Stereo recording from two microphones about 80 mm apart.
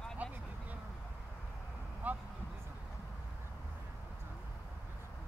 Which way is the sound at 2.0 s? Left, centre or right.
Centre.